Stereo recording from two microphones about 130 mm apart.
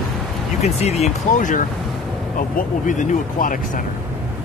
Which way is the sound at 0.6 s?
55° left (ahead or behind).